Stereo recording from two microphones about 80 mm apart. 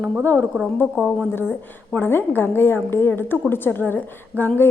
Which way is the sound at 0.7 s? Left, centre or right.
Left.